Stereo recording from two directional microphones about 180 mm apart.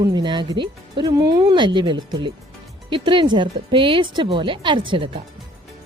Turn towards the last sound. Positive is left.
turn(degrees=-30)  # may be behind; listen again after turning